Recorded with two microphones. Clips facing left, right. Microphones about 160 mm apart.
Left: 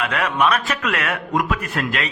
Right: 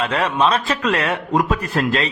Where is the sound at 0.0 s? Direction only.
30° right (ahead or behind).